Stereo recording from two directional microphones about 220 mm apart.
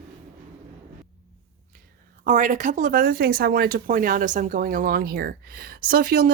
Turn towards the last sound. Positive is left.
turn(degrees=-40)  # may be behind; listen again after turning